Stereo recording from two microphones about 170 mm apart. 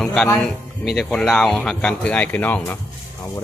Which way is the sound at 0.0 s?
5° left (ahead or behind).